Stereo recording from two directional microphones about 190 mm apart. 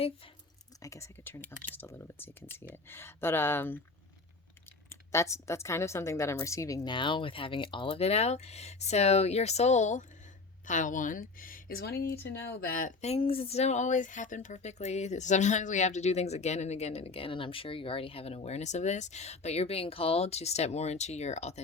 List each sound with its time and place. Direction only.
0.8 s speech: 15° left (ahead or behind)
4.9 s speech: 15° left (ahead or behind); by 21.6 s 35° left (ahead or behind)